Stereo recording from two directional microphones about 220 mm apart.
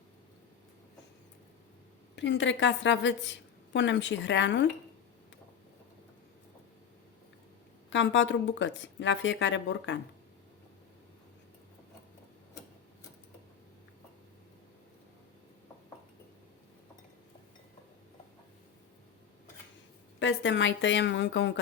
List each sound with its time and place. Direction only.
2.1 s a woman's voice: 55° left (ahead or behind)
7.9 s a woman's voice: 55° left (ahead or behind)
20.1 s a woman's voice: 55° left (ahead or behind)